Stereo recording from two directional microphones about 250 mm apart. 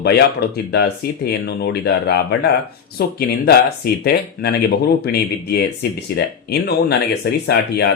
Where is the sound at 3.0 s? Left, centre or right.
Left.